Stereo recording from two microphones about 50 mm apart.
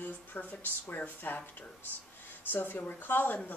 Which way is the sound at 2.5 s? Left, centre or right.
Left.